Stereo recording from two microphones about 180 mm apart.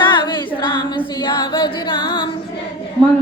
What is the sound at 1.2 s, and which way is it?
Music, 25° left (ahead or behind).